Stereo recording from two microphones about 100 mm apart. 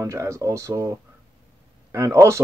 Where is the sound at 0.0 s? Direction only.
30° right (ahead or behind).